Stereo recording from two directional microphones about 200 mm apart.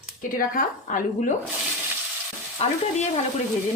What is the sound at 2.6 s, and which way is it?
Speech, 30° left (ahead or behind).